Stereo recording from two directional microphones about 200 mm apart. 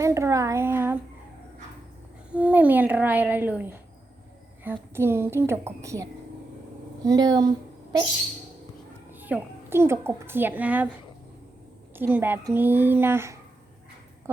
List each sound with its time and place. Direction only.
0.0 s a sound: 15° right (ahead or behind)
2.3 s a woman's voice: 5° right (ahead or behind)
9.1 s a child's voice: 10° right (ahead or behind)
11.9 s a woman's voice: 10° right (ahead or behind)